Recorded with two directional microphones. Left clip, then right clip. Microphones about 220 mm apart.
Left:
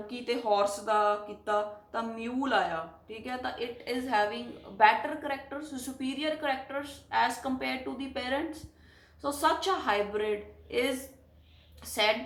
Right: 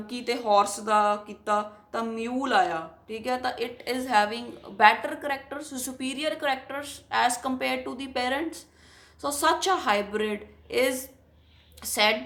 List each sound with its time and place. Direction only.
0.1 s speech: 50° right (ahead or behind)